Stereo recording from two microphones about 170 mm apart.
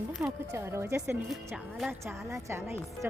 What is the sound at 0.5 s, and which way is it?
A woman's voice, 15° right (ahead or behind).